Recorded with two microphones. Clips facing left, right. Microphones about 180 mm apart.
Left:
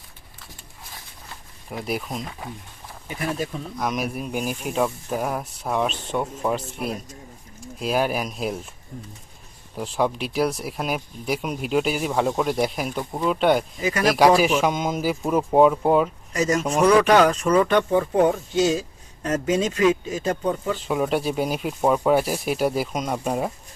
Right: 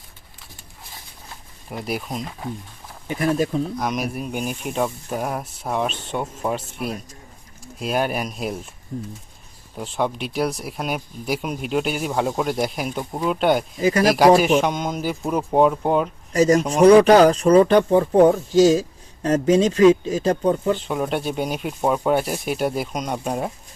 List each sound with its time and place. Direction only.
1.7 s speech: centre (ahead or behind)
3.1 s speech: 40° right (ahead or behind)
3.8 s speech: centre (ahead or behind)
9.7 s speech: centre (ahead or behind)
16.3 s speech: 35° right (ahead or behind)
20.7 s speech: centre (ahead or behind)